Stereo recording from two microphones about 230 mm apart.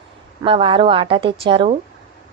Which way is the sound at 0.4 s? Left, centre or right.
Right.